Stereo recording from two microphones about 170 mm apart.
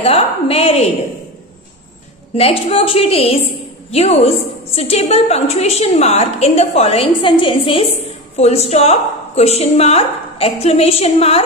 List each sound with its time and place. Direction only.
0.0 s a woman's voice: 35° left (ahead or behind)
2.3 s a woman's voice: 35° left (ahead or behind)